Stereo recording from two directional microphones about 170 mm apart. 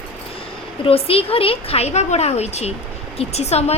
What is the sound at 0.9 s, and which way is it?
A child's voice, 35° left (ahead or behind).